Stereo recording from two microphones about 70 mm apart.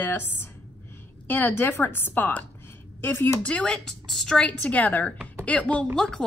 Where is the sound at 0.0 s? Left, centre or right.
Left.